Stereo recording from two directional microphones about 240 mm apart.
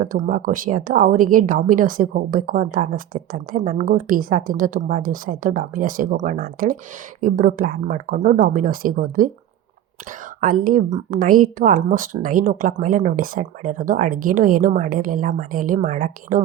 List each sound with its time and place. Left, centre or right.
0.0 s speech: right
10.4 s speech: right